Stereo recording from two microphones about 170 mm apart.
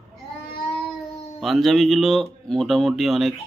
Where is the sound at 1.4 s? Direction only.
Centre (ahead or behind).